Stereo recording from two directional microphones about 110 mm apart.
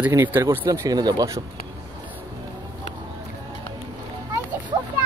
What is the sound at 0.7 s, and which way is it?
Speech, 35° right (ahead or behind).